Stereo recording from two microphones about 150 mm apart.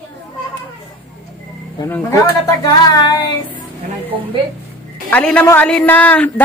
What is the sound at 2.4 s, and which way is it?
Speech, 25° left (ahead or behind).